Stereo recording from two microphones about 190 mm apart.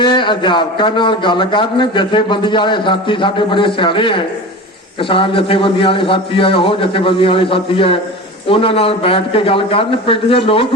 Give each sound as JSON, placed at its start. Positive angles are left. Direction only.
{"t": 0.0, "sound": "a man's voice", "side_deg": 25}